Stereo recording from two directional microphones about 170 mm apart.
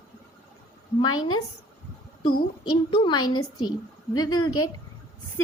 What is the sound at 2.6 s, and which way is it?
A woman's voice, 30° left (ahead or behind).